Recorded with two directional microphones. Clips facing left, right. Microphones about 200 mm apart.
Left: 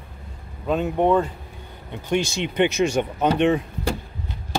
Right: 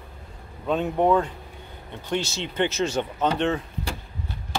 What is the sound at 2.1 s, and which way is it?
Speech, 15° left (ahead or behind).